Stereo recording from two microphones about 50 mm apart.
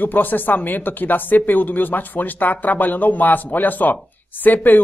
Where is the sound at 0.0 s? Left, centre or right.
Left.